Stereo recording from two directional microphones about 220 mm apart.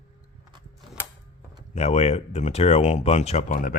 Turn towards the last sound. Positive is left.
turn(degrees=35)  # may be behind; listen again after turning